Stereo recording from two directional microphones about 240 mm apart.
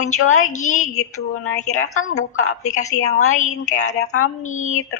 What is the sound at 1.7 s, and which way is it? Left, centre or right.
Speech, left.